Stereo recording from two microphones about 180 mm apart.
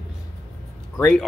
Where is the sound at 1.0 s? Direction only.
5° left (ahead or behind).